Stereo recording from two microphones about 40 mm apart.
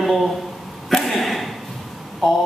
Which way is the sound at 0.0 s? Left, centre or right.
Centre.